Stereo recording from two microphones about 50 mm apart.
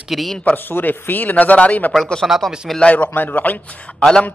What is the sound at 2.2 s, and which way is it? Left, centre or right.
Speech, centre.